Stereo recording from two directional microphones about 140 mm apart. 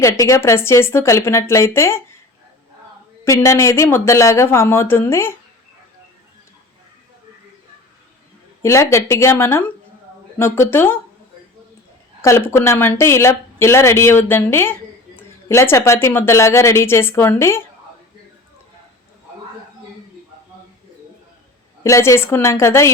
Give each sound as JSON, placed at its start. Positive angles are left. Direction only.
{"t": 0.0, "sound": "speech", "side_deg": 20}
{"t": 3.4, "sound": "speech", "side_deg": 20}
{"t": 8.6, "sound": "speech", "side_deg": 20}
{"t": 12.2, "sound": "speech", "side_deg": 20}
{"t": 21.8, "sound": "speech", "side_deg": 20}